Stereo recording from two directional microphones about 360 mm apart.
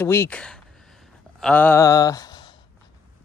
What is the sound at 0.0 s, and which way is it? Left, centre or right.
Speech, centre.